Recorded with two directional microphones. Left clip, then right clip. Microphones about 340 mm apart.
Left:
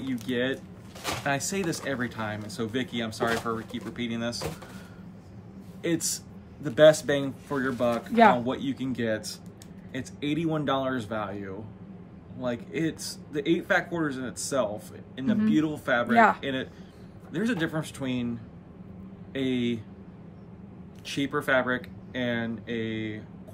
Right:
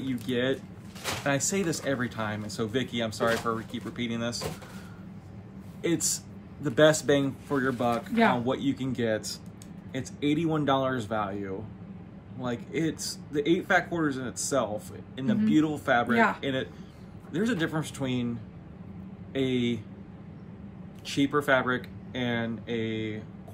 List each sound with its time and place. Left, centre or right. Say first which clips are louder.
0.1 s speech: even; centre
5.8 s speech: even; centre
8.1 s speech: left 7 dB; centre
8.5 s speech: right 1 dB; centre
19.3 s speech: right 1 dB; centre
21.1 s speech: right 1 dB; centre